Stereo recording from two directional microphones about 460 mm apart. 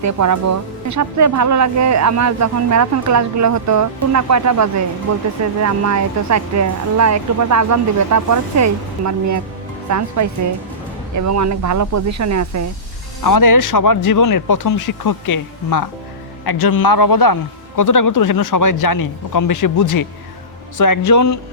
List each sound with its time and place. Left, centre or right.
0.0 s speech: right
13.2 s speech: left